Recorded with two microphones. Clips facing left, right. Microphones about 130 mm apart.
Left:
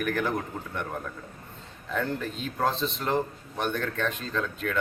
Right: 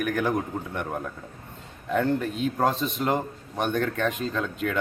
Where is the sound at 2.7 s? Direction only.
15° right (ahead or behind).